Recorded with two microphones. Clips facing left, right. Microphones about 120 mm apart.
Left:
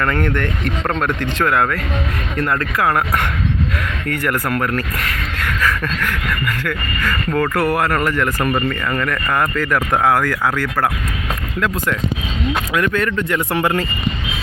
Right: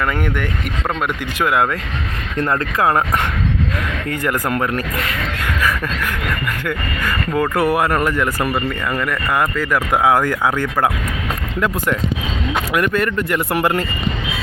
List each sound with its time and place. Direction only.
0.0 s speech: 10° right (ahead or behind)
2.4 s speech: 25° right (ahead or behind)
5.4 s a sound: 15° right (ahead or behind)
6.7 s speech: 15° right (ahead or behind)
12.7 s speech: 10° right (ahead or behind)